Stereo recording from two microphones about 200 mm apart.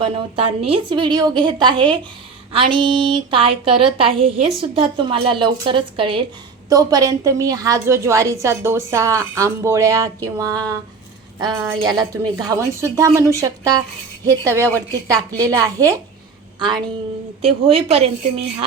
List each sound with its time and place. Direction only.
0.0 s a woman's voice: 25° right (ahead or behind)